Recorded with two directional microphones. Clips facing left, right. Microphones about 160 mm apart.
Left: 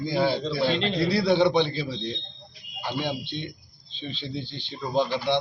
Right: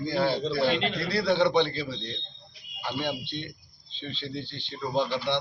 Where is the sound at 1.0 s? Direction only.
10° left (ahead or behind).